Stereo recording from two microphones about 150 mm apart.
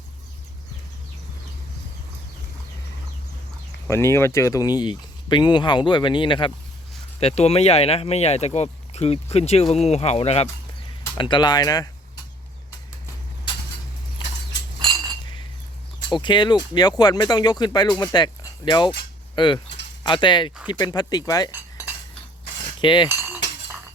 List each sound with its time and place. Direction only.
3.8 s speech: 15° left (ahead or behind); by 10.5 s 45° left (ahead or behind)
11.2 s speech: 30° left (ahead or behind)
16.0 s speech: 30° left (ahead or behind)
22.8 s speech: 30° left (ahead or behind)